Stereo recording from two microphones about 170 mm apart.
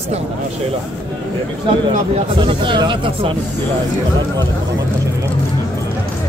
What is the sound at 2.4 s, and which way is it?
Speech, 30° right (ahead or behind).